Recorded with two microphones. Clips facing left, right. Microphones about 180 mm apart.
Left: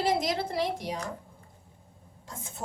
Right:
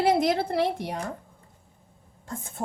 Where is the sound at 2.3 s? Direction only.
55° right (ahead or behind).